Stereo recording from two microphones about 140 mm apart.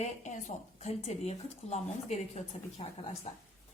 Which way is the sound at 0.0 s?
55° left (ahead or behind).